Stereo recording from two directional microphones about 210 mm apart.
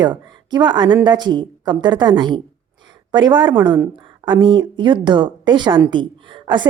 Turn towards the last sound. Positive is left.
turn(degrees=-20)  # may be behind; listen again after turning